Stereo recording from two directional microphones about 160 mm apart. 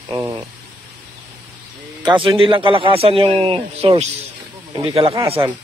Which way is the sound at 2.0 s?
30° right (ahead or behind).